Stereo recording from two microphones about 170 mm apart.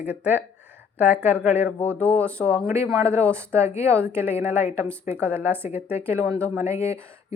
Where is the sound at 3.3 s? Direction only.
15° right (ahead or behind).